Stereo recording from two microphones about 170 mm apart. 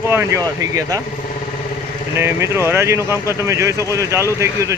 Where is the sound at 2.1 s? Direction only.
15° right (ahead or behind).